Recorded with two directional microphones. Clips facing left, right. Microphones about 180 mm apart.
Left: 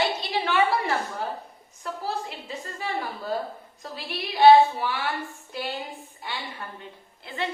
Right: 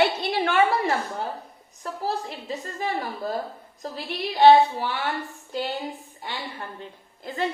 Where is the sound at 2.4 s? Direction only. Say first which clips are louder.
Right 4 dB; 40° right (ahead or behind).